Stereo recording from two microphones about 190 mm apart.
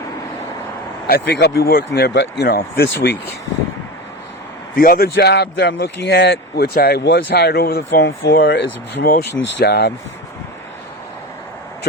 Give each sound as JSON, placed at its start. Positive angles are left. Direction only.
{"t": 1.0, "sound": "speech", "side_deg": 60}
{"t": 4.8, "sound": "speech", "side_deg": 50}